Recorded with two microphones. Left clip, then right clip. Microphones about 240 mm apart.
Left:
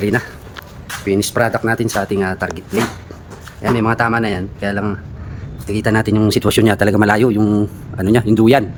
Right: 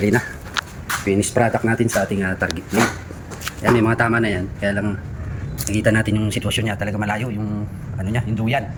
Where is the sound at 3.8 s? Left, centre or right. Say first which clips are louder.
Left 2 dB; centre; by 7.4 s left.